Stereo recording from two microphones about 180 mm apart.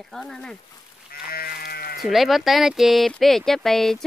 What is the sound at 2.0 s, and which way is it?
Speech, centre (ahead or behind).